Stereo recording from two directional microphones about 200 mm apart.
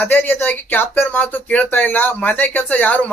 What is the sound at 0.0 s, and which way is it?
Speech, 10° left (ahead or behind).